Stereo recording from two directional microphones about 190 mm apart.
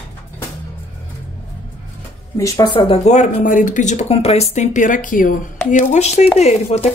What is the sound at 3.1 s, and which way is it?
Speech, 40° left (ahead or behind).